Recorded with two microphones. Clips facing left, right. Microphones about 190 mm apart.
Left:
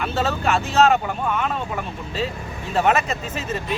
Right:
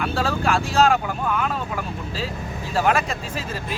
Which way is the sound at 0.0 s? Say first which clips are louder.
Even; centre (ahead or behind).